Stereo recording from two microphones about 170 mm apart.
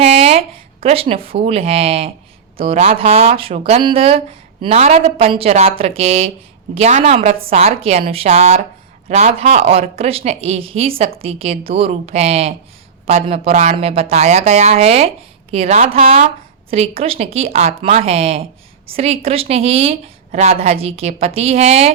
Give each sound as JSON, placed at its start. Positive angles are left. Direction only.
{"t": 0.0, "sound": "speech", "side_deg": -35}